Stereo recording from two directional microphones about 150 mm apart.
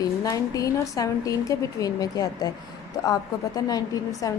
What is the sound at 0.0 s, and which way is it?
A woman's voice, 25° left (ahead or behind).